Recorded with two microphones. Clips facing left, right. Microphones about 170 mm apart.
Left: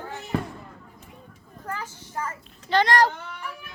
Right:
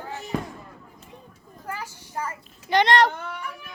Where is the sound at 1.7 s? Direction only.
10° right (ahead or behind).